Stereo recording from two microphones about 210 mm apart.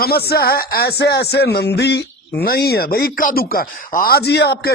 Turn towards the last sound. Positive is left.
turn(degrees=50)  # may be behind; listen again after turning